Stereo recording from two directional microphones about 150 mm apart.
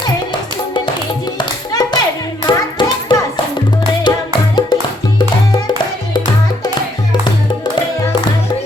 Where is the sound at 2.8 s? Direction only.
30° left (ahead or behind).